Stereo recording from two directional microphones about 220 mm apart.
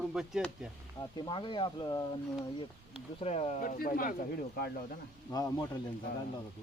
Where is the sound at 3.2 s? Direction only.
30° left (ahead or behind).